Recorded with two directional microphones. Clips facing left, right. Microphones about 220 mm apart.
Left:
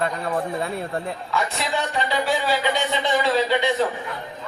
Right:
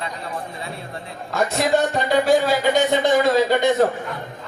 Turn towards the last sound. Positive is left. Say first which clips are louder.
# right 4 dB
turn(degrees=-45)  # may be behind; listen again after turning